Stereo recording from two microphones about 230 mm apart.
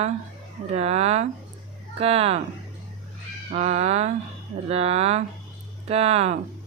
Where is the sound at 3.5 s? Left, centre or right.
Right.